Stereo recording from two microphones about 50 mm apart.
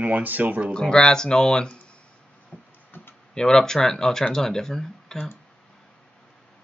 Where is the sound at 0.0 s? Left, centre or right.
Right.